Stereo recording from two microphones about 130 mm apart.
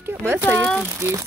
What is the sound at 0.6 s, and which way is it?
Speech, 10° left (ahead or behind).